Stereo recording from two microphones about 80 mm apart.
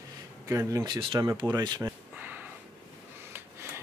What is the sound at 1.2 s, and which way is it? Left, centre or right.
Speech, right.